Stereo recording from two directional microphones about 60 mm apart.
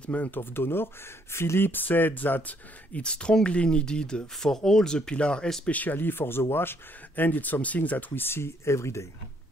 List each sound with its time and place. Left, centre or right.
0.0 s speech: left
2.9 s speech: centre
5.8 s speech: left
8.1 s speech: left